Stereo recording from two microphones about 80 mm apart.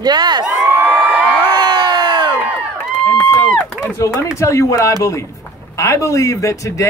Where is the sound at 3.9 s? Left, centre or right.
Left.